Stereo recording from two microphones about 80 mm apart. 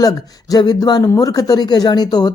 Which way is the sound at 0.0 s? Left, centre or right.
Left.